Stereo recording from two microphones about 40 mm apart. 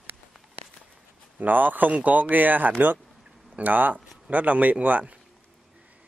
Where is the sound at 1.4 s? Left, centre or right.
Right.